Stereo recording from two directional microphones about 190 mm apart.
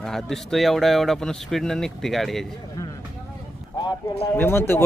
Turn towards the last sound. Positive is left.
turn(degrees=10)  # may be behind; listen again after turning